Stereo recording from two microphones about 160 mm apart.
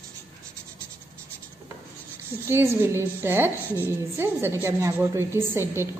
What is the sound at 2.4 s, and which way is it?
A woman's voice, 15° right (ahead or behind).